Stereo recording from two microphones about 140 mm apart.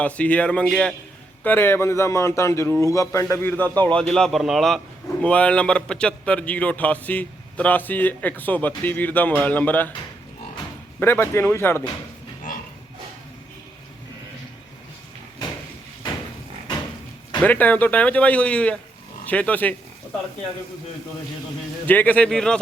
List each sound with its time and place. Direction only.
0.0 s a man's voice: 10° left (ahead or behind)
1.5 s a man's voice: 15° left (ahead or behind)
11.0 s a man's voice: 15° left (ahead or behind)
17.4 s a man's voice: 10° left (ahead or behind)
21.8 s a man's voice: 10° left (ahead or behind)